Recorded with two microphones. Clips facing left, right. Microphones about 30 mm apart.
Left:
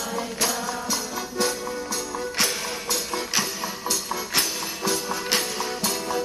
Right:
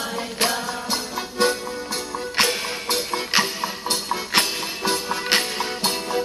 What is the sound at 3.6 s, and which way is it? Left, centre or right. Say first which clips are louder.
Music: right 3 dB; right.